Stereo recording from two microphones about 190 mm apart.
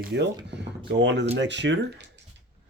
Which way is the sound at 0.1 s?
65° right (ahead or behind).